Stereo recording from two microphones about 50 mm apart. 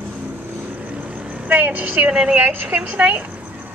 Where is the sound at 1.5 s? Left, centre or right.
Right.